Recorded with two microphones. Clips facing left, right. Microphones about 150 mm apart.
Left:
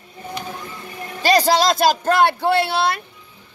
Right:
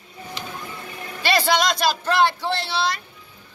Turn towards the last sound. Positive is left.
turn(degrees=55)  # may be behind; listen again after turning